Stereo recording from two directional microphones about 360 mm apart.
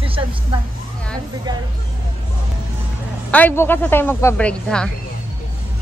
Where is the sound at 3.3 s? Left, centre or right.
Centre.